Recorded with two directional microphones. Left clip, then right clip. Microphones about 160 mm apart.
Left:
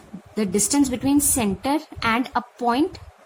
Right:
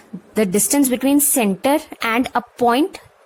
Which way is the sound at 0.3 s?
55° right (ahead or behind).